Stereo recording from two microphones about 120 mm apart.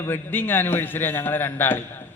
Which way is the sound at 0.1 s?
15° left (ahead or behind).